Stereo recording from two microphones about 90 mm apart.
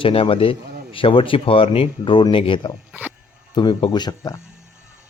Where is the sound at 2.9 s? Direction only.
20° right (ahead or behind).